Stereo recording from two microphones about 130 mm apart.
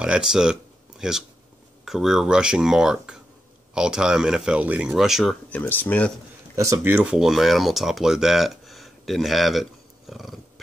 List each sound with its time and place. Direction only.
0.0 s speech: 5° right (ahead or behind)
5.5 s speech: 15° left (ahead or behind)
6.5 s speech: 25° right (ahead or behind)
7.2 s speech: centre (ahead or behind)